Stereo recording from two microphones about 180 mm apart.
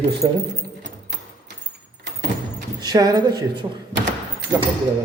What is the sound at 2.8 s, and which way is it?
Speech, 20° right (ahead or behind).